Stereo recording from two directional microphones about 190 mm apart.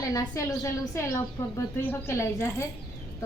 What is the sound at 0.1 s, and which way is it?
A woman's voice, 15° left (ahead or behind).